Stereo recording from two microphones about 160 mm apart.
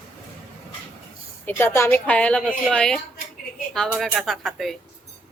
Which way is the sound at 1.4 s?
15° left (ahead or behind).